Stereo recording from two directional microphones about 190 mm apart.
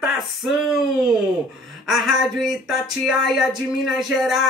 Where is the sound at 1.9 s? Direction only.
Centre (ahead or behind).